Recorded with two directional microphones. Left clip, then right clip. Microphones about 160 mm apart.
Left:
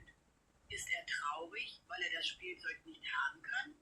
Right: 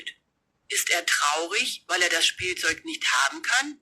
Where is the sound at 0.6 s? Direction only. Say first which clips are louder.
Right 17 dB; 60° right (ahead or behind).